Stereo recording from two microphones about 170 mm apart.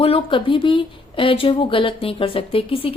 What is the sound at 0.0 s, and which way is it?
Speech, 30° left (ahead or behind).